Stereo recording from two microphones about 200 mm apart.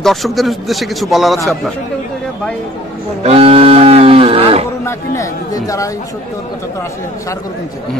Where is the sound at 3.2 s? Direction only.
30° right (ahead or behind).